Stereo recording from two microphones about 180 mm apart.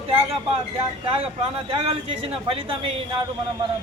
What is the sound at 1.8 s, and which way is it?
A man's voice, 35° right (ahead or behind).